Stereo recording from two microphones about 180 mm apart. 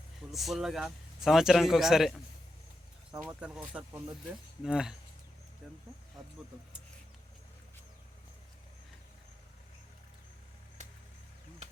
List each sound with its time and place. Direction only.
0.3 s speech: centre (ahead or behind)
3.2 s speech: 5° right (ahead or behind)
10.8 s a sound: 40° right (ahead or behind)